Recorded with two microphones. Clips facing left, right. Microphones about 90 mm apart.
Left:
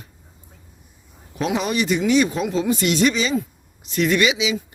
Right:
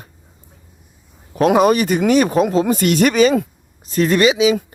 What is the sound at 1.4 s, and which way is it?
Speech, 50° right (ahead or behind).